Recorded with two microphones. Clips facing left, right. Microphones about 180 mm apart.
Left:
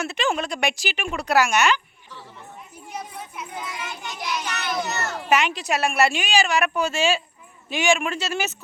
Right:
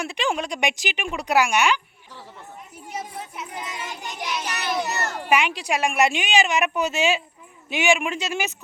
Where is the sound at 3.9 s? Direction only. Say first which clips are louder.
Even; 35° right (ahead or behind).